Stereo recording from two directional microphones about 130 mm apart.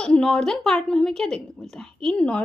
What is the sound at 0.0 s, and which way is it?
A woman's voice, 5° left (ahead or behind).